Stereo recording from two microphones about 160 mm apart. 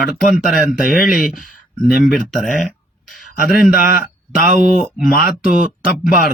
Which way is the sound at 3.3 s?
70° left (ahead or behind).